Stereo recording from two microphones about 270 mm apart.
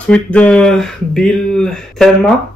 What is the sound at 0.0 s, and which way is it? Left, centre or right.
Speech, centre.